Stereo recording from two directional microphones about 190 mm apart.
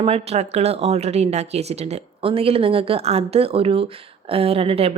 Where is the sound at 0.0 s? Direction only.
30° right (ahead or behind).